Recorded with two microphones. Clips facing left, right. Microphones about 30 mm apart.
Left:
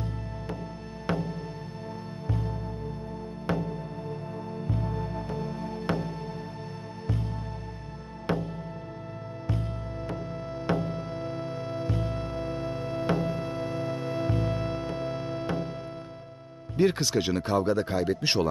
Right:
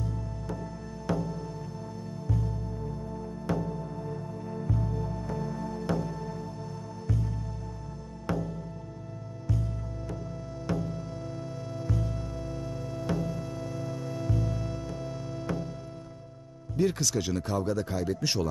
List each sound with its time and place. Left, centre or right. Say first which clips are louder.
1.0 s music: left 1 dB; left
8.3 s music: left 2 dB; left
10.7 s music: left 4 dB; left
16.7 s speech: left 3 dB; left